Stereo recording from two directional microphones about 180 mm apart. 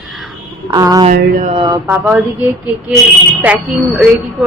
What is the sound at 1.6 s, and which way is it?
Mantra, 15° right (ahead or behind).